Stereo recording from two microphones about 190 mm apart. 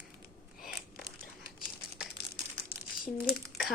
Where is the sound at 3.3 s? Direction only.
Centre (ahead or behind).